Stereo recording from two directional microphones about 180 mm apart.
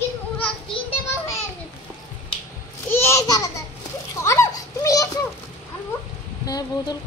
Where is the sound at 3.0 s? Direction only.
20° left (ahead or behind).